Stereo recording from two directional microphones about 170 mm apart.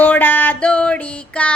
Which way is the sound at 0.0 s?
10° left (ahead or behind).